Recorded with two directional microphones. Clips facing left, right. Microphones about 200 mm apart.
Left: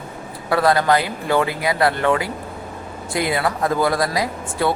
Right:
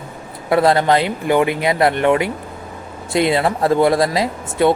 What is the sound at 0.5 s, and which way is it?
Speech, 25° right (ahead or behind).